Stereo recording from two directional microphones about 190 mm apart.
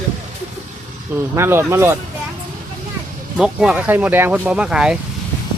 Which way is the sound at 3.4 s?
5° right (ahead or behind).